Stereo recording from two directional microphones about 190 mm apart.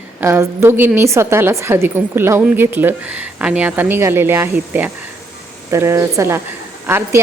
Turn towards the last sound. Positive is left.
turn(degrees=-10)  # may be behind; listen again after turning